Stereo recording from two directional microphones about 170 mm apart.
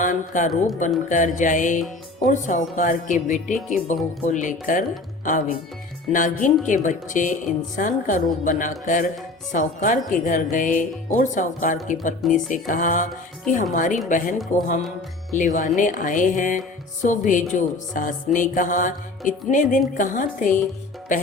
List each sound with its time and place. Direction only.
0.0 s speech: 50° left (ahead or behind)